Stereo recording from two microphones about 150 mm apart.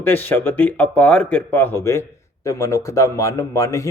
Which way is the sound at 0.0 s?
15° left (ahead or behind).